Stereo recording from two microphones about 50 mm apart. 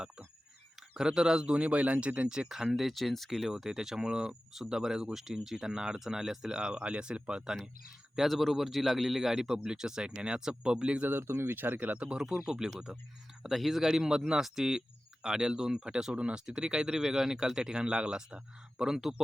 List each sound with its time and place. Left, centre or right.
0.9 s speech: centre
2.7 s speech: centre
6.5 s speech: centre
8.3 s speech: centre; by 11.1 s right
11.1 s speech: right
11.5 s speech: right
12.1 s speech: centre